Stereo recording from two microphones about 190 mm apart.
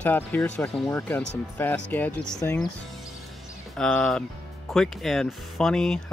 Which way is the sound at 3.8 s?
5° left (ahead or behind).